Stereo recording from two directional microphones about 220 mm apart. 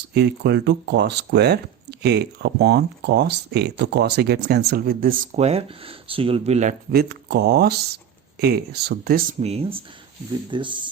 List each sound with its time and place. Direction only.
0.1 s speech: 50° right (ahead or behind)
9.4 s speech: 30° right (ahead or behind)